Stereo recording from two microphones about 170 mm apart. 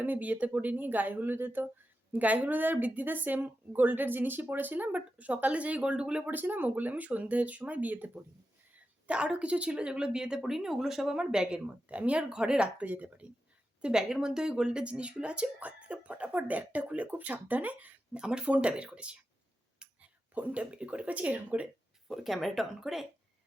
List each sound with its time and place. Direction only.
0.0 s a woman's voice: 10° right (ahead or behind)